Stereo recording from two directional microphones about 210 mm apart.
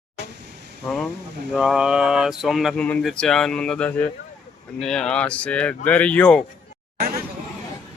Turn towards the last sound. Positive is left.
turn(degrees=-45)  # may be behind; listen again after turning